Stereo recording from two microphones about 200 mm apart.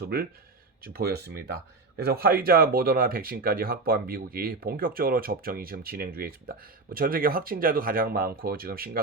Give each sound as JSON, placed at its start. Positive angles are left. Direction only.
{"t": 0.0, "sound": "speech", "side_deg": -50}